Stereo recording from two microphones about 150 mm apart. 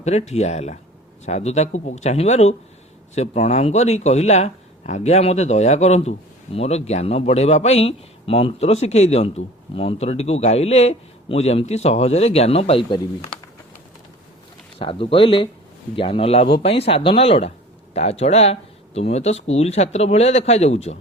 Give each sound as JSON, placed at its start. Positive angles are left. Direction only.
{"t": 0.0, "sound": "speech", "side_deg": 45}
{"t": 14.8, "sound": "speech", "side_deg": 35}